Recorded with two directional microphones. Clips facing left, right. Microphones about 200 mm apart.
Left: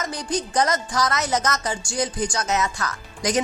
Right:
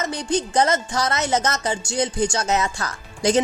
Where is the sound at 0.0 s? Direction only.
25° right (ahead or behind).